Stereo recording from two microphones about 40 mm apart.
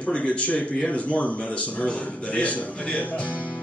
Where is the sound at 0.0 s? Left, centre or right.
Left.